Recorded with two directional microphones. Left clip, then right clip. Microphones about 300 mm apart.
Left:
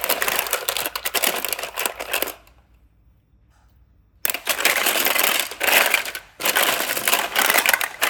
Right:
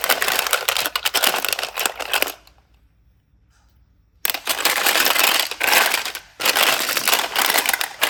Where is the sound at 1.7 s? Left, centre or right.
Centre.